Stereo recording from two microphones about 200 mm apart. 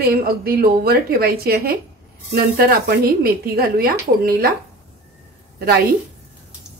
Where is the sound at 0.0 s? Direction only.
50° right (ahead or behind).